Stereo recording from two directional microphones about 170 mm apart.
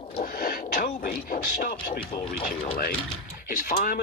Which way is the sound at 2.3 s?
60° left (ahead or behind).